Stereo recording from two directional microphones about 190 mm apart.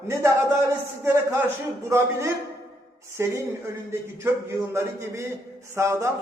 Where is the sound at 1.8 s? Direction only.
15° right (ahead or behind).